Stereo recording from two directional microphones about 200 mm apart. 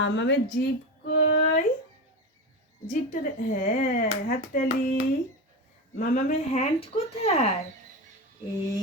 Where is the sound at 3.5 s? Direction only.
40° left (ahead or behind).